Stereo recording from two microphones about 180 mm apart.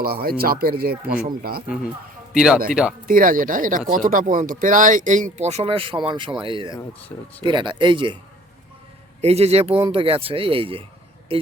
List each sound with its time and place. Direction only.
0.0 s speech: 55° right (ahead or behind)
2.3 s speech: 5° right (ahead or behind)
3.1 s speech: 50° right (ahead or behind); by 6.7 s 30° right (ahead or behind)
7.1 s speech: 15° left (ahead or behind)
7.4 s speech: 25° right (ahead or behind)
9.2 s speech: 35° right (ahead or behind)